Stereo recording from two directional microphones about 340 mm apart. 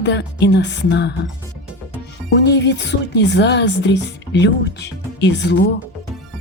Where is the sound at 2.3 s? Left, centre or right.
Left.